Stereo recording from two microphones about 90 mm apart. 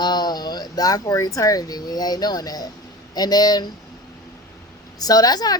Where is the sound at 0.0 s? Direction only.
50° left (ahead or behind).